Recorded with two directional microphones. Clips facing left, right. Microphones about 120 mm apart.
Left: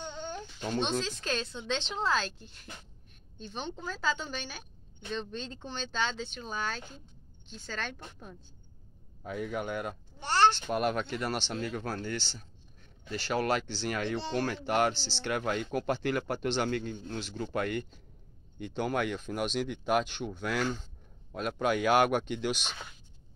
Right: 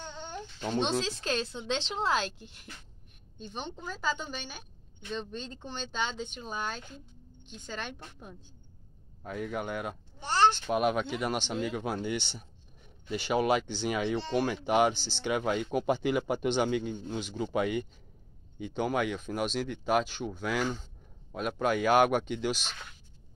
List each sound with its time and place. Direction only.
1.0 s a woman's voice: 25° right (ahead or behind)
9.2 s speech: centre (ahead or behind)
12.4 s a sound: 10° right (ahead or behind)
13.8 s speech: 5° right (ahead or behind)